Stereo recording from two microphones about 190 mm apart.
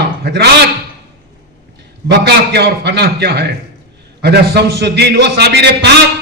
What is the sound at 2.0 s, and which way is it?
A man's voice, 60° right (ahead or behind).